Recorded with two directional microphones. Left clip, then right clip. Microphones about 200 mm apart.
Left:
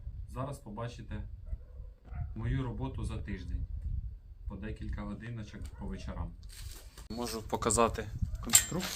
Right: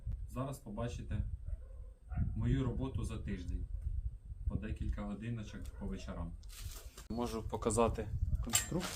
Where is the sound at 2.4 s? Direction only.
10° left (ahead or behind).